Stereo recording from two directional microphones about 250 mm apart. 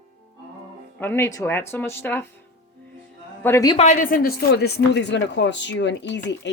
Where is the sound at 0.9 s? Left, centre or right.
Centre.